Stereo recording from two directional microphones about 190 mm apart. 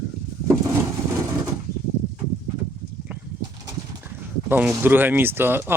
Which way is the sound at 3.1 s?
10° right (ahead or behind).